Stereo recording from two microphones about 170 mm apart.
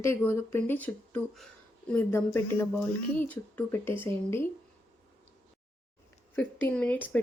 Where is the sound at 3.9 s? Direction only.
30° right (ahead or behind).